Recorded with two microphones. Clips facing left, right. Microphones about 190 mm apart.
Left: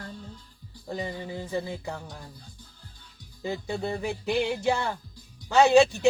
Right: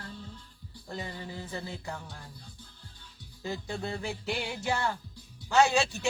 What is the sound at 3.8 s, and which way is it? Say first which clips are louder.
Speech: left 5 dB; 55° left (ahead or behind).